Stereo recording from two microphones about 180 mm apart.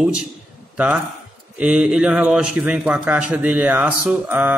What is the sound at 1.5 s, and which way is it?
A man's voice, 5° right (ahead or behind).